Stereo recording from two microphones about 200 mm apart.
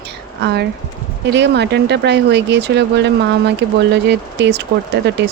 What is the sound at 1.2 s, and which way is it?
Speech, 60° right (ahead or behind).